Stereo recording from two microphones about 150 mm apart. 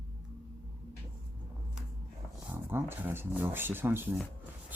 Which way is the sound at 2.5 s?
15° right (ahead or behind).